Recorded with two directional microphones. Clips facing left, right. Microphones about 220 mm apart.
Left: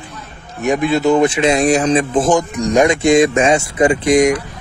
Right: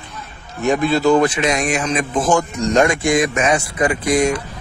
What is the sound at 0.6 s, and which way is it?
Speech, 20° left (ahead or behind).